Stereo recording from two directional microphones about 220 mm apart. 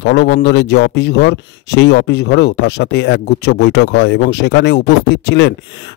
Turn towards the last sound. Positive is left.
turn(degrees=50)  # may be behind; listen again after turning